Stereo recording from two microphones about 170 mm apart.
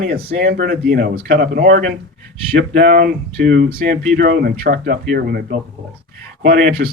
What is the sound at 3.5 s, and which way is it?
Speech, 70° right (ahead or behind).